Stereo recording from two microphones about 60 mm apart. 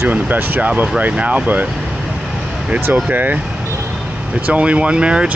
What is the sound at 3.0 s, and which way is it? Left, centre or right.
Speech, right.